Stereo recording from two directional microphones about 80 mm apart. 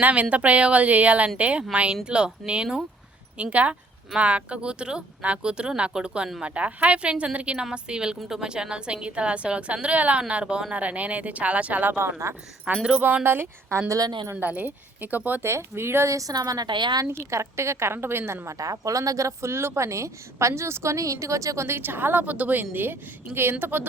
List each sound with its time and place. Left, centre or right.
0.0 s a woman's voice: centre; by 12.4 s right
12.6 s a woman's voice: centre
13.2 s a woman's voice: right
14.3 s speech: right
15.4 s a woman's voice: right
16.1 s a woman's voice: right
16.6 s speech: right
17.1 s a woman's voice: right